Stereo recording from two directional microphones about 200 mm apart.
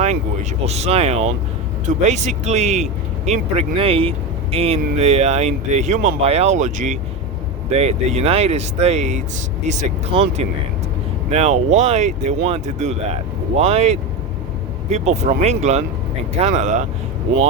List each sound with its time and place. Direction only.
0.6 s speech: 30° right (ahead or behind)